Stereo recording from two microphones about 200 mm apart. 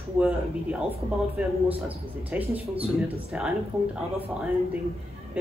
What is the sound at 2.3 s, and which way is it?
Speech, 10° right (ahead or behind).